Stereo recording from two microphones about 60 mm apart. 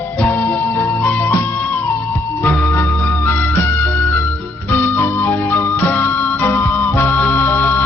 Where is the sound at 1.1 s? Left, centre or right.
Left.